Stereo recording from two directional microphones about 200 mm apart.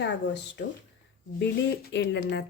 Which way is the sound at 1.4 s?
60° left (ahead or behind).